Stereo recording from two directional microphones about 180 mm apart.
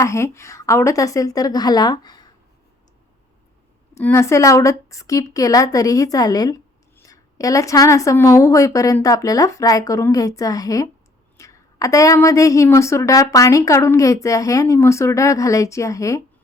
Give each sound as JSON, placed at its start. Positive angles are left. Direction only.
{"t": 0.0, "sound": "a woman's voice", "side_deg": 15}
{"t": 3.9, "sound": "a woman's voice", "side_deg": 15}